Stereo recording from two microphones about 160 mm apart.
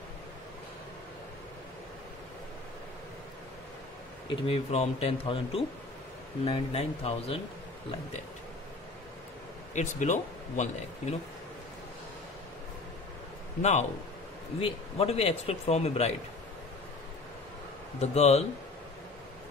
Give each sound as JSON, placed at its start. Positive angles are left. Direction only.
{"t": 4.5, "sound": "speech", "side_deg": 40}
{"t": 9.8, "sound": "speech", "side_deg": 50}
{"t": 13.6, "sound": "speech", "side_deg": 45}
{"t": 17.9, "sound": "speech", "side_deg": 45}